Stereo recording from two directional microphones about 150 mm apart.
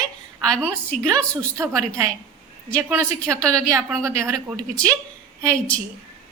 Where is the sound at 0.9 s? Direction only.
5° left (ahead or behind).